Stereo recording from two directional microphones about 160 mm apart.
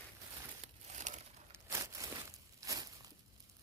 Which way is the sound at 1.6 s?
20° right (ahead or behind).